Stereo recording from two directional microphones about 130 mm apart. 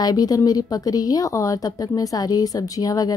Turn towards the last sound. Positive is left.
turn(degrees=30)  # may be behind; listen again after turning